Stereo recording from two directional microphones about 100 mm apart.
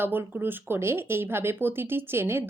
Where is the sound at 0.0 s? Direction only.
20° right (ahead or behind).